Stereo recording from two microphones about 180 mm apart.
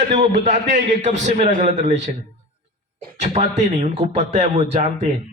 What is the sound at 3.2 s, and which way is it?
A man's voice, 40° right (ahead or behind).